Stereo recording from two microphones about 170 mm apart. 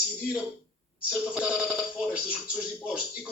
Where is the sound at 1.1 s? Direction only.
5° right (ahead or behind).